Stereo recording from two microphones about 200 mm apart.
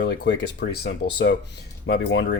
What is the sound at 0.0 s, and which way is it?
Speech, 60° left (ahead or behind).